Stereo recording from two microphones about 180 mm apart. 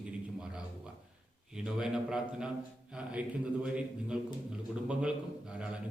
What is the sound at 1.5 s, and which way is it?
A man's voice, 5° right (ahead or behind).